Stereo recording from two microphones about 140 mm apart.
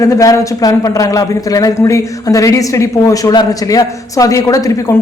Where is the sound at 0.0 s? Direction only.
25° left (ahead or behind).